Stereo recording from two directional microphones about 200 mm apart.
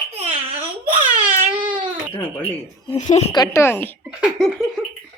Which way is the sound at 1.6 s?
25° right (ahead or behind).